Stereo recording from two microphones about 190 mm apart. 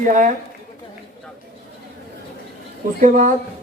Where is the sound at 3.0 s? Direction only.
45° right (ahead or behind).